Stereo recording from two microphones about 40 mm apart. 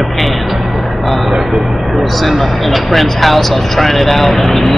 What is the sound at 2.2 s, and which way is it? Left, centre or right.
Speech, centre.